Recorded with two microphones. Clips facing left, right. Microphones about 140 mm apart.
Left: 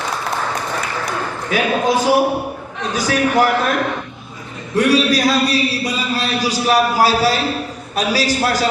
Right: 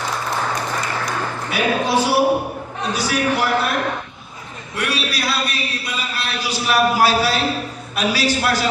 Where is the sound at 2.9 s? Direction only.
45° left (ahead or behind).